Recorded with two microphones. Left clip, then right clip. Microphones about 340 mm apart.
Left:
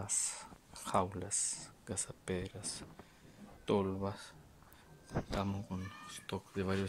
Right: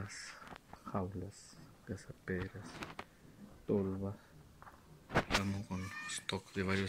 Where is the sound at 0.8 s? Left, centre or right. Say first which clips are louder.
Left 8 dB; left.